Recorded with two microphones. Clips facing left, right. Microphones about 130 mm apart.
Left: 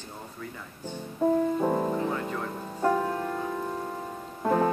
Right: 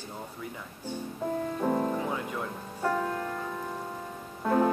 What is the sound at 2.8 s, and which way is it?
Music, 20° left (ahead or behind).